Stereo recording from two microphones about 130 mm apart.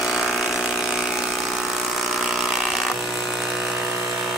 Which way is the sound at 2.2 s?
Centre (ahead or behind).